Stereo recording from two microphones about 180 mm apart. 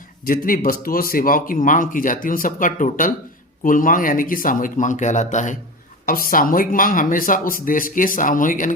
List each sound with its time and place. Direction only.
0.3 s speech: 50° left (ahead or behind)